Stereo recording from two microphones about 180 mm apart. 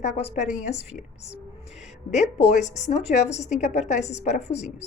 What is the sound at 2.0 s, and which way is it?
A woman's voice, 40° left (ahead or behind).